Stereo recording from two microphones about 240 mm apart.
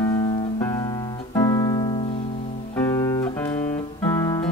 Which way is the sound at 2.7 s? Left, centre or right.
Centre.